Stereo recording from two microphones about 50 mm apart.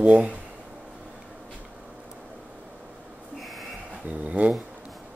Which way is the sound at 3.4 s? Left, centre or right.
Centre.